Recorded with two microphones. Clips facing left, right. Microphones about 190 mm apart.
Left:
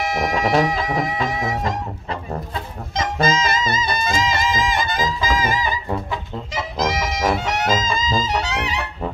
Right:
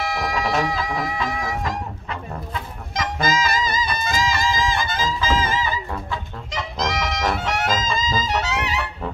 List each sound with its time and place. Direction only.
0.0 s a sound: 20° left (ahead or behind)
0.7 s music: 20° left (ahead or behind)
6.5 s brass instrument: 5° left (ahead or behind)